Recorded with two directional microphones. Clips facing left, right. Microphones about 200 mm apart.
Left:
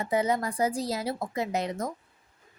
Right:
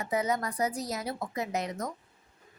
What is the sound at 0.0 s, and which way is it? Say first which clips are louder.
Speech: left 3 dB; 30° left (ahead or behind).